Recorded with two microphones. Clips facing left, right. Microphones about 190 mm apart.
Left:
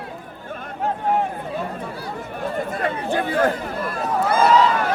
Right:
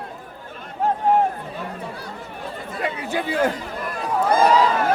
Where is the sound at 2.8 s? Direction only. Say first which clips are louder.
Even; 50° left (ahead or behind).